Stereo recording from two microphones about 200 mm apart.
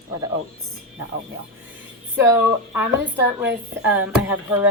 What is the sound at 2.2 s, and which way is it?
A woman's voice, 10° right (ahead or behind).